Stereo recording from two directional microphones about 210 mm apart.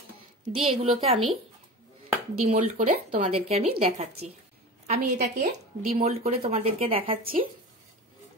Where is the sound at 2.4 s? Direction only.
35° right (ahead or behind).